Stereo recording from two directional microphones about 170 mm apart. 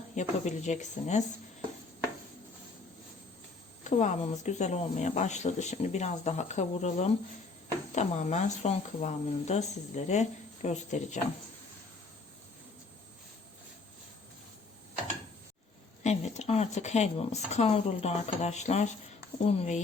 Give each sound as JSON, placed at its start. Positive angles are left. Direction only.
{"t": 0.2, "sound": "speech", "side_deg": 45}
{"t": 3.8, "sound": "speech", "side_deg": 45}
{"t": 16.0, "sound": "speech", "side_deg": 40}